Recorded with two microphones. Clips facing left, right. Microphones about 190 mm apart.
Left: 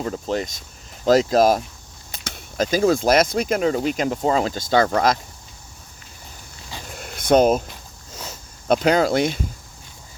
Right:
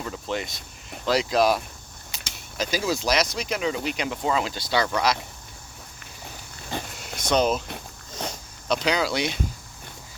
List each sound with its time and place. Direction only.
0.0 s speech: 40° left (ahead or behind)
7.0 s vehicle: 55° left (ahead or behind)
8.6 s speech: 50° left (ahead or behind)